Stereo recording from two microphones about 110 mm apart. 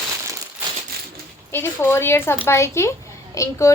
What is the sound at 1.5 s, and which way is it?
A woman's voice, 20° left (ahead or behind).